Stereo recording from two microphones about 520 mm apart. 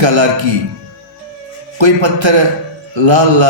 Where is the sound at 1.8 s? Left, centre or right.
Right.